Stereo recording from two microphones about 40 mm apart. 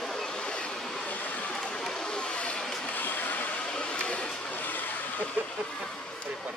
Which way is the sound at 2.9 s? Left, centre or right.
Left.